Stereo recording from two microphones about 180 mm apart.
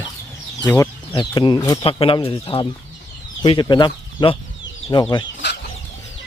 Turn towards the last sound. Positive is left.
turn(degrees=75)  # may be behind; listen again after turning